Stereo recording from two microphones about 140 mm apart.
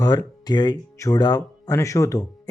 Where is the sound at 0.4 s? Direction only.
30° left (ahead or behind).